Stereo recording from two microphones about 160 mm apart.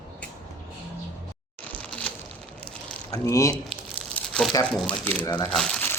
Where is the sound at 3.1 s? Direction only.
20° left (ahead or behind).